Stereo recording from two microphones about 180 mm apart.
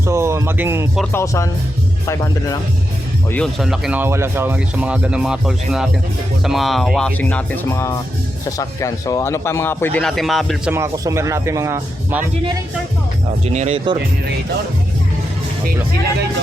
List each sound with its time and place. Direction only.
0.0 s speech: 15° right (ahead or behind)
1.1 s speech: 15° left (ahead or behind)
3.2 s speech: 5° left (ahead or behind)
10.7 s speech: 15° right (ahead or behind)
13.4 s speech: 40° right (ahead or behind)